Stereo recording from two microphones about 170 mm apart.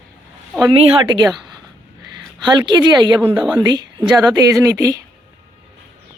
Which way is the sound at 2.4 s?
25° right (ahead or behind).